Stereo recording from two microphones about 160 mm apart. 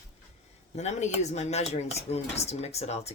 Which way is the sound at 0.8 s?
45° left (ahead or behind).